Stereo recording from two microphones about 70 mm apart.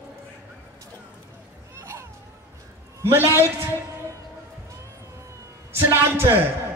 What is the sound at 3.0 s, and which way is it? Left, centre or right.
Speech, right.